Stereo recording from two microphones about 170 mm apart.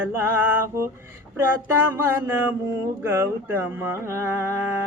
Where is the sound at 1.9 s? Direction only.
15° right (ahead or behind).